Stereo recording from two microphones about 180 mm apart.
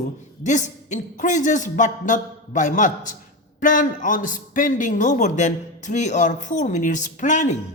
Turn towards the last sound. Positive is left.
turn(degrees=40)  # may be behind; listen again after turning